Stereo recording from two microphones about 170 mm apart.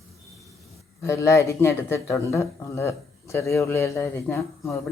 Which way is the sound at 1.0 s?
15° left (ahead or behind).